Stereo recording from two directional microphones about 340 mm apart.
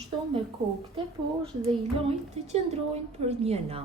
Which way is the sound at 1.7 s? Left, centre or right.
Centre.